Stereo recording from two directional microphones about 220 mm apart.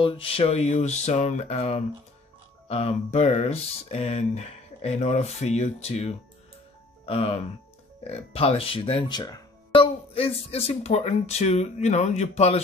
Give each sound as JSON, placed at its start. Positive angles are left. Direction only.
{"t": 0.0, "sound": "speech", "side_deg": 25}